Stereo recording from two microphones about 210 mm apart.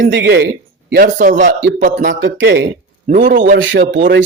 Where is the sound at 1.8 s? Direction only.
40° right (ahead or behind).